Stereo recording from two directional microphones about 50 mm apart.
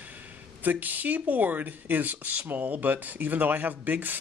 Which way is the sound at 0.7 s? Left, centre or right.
Right.